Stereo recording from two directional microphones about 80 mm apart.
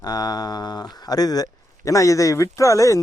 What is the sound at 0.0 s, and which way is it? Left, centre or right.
Speech, left.